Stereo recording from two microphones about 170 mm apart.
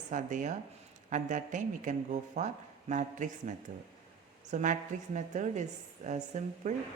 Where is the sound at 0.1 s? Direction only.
50° right (ahead or behind).